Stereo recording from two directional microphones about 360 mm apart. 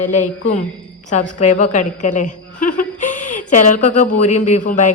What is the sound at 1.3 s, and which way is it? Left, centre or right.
Speech, centre.